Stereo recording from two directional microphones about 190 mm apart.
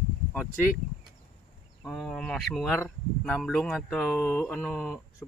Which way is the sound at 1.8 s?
5° left (ahead or behind).